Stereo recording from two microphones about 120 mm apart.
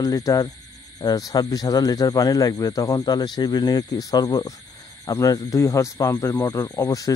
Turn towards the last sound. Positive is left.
turn(degrees=30)  # may be behind; listen again after turning